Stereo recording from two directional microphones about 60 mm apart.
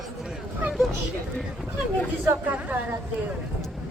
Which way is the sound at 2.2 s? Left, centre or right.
Right.